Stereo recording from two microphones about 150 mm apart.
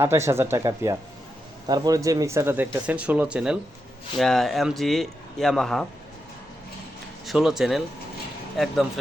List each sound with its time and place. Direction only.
0.0 s speech: 20° right (ahead or behind); by 5.8 s 5° left (ahead or behind)
7.3 s speech: 5° right (ahead or behind)